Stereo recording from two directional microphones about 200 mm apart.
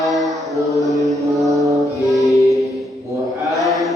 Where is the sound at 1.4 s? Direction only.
15° right (ahead or behind).